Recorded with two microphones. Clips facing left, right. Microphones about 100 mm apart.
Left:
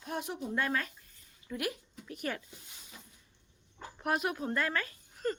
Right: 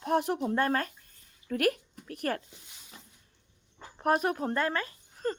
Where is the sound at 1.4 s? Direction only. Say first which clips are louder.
Right 9 dB; 60° right (ahead or behind).